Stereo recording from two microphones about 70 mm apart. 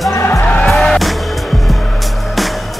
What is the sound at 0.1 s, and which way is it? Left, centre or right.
Music, left.